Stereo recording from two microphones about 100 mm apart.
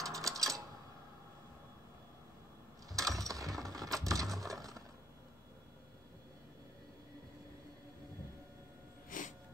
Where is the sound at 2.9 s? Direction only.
35° right (ahead or behind).